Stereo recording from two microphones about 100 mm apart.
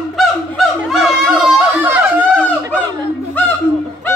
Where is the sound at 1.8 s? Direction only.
15° right (ahead or behind).